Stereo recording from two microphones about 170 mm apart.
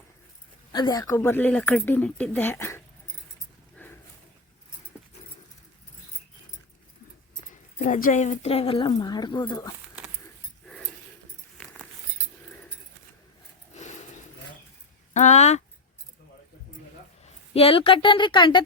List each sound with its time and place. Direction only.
0.7 s speech: 25° left (ahead or behind)
3.8 s a sound: 10° left (ahead or behind)
7.8 s speech: 50° left (ahead or behind); by 9.7 s 25° left (ahead or behind)
13.7 s a sound: 45° left (ahead or behind)
15.1 s speech: 45° left (ahead or behind)
17.2 s speech: 35° left (ahead or behind)